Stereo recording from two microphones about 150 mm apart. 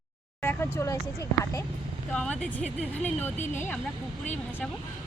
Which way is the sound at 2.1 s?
5° left (ahead or behind).